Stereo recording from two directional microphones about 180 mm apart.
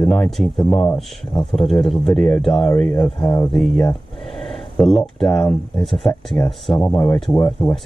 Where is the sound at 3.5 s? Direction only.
Centre (ahead or behind).